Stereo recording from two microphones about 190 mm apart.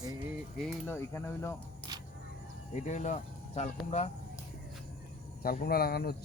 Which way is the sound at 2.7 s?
40° left (ahead or behind).